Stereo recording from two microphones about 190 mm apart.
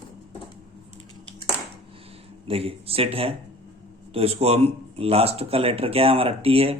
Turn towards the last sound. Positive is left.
turn(degrees=-30)  # may be behind; listen again after turning